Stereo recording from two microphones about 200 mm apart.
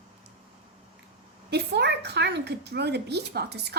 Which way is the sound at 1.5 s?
55° right (ahead or behind).